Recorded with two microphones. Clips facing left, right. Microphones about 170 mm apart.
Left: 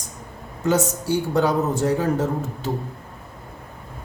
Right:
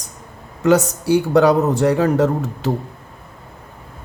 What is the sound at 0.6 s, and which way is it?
A man's voice, 70° right (ahead or behind).